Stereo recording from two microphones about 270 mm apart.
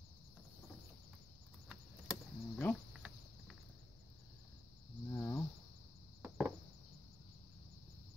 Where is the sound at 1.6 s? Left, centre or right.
Centre.